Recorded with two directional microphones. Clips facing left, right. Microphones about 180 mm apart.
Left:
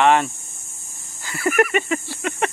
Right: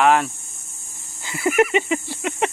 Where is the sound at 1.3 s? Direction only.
20° right (ahead or behind).